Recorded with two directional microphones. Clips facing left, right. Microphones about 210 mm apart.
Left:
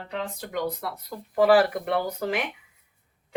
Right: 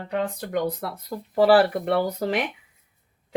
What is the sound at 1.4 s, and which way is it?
Speech, 30° right (ahead or behind).